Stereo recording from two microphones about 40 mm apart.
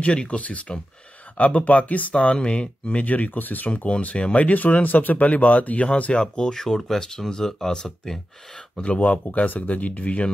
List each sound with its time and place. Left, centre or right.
0.0 s speech: left
2.1 s speech: left
3.7 s speech: left
6.1 s speech: left
9.0 s speech: left